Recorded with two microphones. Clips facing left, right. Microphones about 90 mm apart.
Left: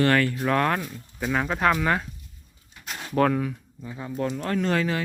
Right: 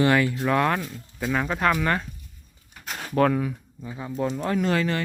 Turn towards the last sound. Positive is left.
turn(degrees=0)  # may be behind; listen again after turning